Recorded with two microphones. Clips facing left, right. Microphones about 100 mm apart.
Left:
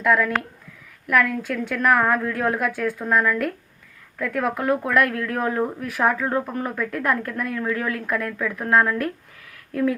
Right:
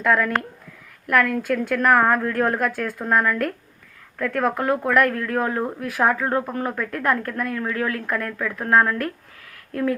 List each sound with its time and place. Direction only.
0.0 s a woman's voice: centre (ahead or behind)
5.3 s speech: 25° right (ahead or behind)
5.5 s a woman's voice: centre (ahead or behind)
8.3 s speech: 5° right (ahead or behind)
8.7 s a woman's voice: 5° left (ahead or behind)